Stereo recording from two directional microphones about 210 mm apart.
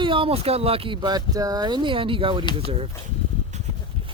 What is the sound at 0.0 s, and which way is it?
Speech, 25° right (ahead or behind).